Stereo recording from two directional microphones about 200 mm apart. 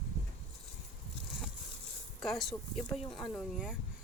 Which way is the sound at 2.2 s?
Centre (ahead or behind).